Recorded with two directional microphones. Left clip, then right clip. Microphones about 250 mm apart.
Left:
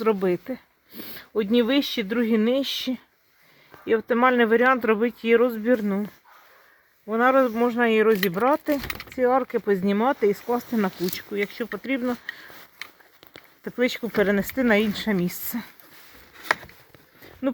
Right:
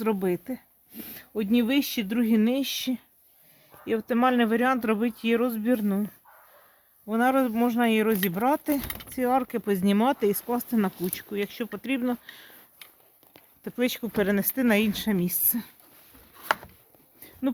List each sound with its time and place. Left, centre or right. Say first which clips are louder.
0.0 s speech: left 5 dB; centre
7.1 s speech: left 5 dB; centre
13.7 s speech: left 4 dB; centre